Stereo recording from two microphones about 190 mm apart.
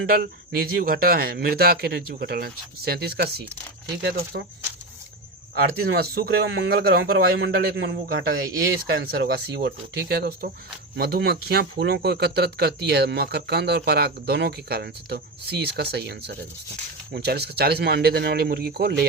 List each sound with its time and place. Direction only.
0.1 s speech: 50° right (ahead or behind)
5.5 s speech: 55° right (ahead or behind)